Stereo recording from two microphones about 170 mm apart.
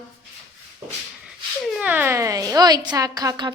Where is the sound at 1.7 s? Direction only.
10° right (ahead or behind).